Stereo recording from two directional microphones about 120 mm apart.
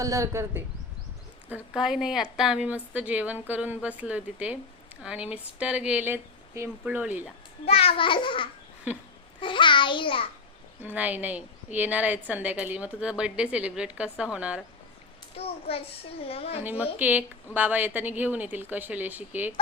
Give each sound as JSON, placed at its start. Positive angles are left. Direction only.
{"t": 0.0, "sound": "speech", "side_deg": -25}
{"t": 1.5, "sound": "a woman's voice", "side_deg": -10}
{"t": 7.6, "sound": "a child's voice", "side_deg": 55}
{"t": 10.8, "sound": "a woman's voice", "side_deg": -15}
{"t": 15.4, "sound": "a child's voice", "side_deg": 55}
{"t": 16.6, "sound": "a woman's voice", "side_deg": -15}